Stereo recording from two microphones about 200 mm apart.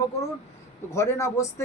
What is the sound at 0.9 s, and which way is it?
Speech, 15° left (ahead or behind).